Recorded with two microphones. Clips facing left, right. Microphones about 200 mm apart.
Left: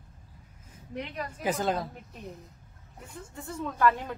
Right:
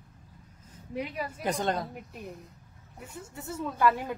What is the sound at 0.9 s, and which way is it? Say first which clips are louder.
Speech: right 2 dB; 10° right (ahead or behind).